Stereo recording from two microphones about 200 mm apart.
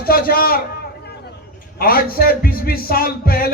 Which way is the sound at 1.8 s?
50° left (ahead or behind).